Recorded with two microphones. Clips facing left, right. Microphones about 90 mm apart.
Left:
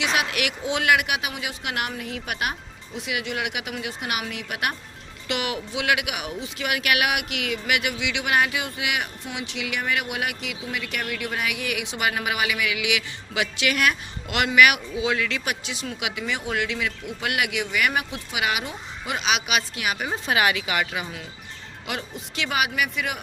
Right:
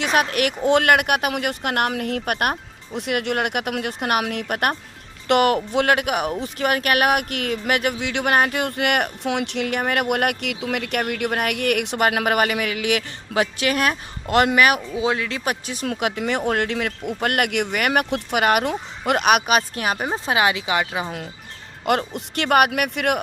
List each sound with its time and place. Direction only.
0.0 s a man's voice: 45° right (ahead or behind); by 21.1 s 30° right (ahead or behind)
21.8 s speech: 55° right (ahead or behind)